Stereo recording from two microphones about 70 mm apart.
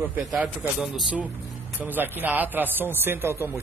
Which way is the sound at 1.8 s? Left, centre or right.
Right.